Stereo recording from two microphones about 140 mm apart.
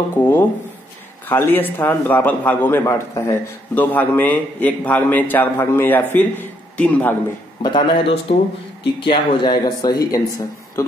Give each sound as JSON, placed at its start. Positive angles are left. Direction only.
{"t": 0.1, "sound": "a man's voice", "side_deg": 15}
{"t": 7.6, "sound": "speech", "side_deg": 35}